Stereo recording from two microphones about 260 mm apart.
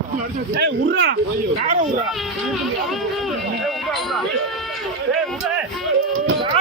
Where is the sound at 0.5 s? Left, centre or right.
Right.